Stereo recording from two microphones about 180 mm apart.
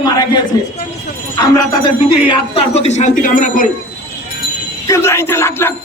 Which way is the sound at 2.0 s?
30° left (ahead or behind).